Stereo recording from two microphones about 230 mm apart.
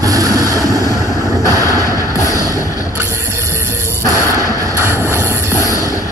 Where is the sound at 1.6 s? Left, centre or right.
Centre.